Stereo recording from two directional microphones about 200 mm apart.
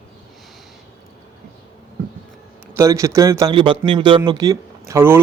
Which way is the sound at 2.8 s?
15° right (ahead or behind).